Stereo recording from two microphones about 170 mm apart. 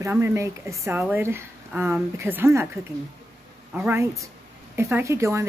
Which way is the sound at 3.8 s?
15° right (ahead or behind).